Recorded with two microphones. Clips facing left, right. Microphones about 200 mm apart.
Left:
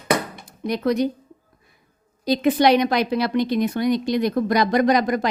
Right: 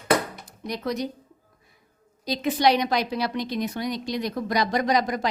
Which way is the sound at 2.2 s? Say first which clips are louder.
Left 5 dB; 55° left (ahead or behind).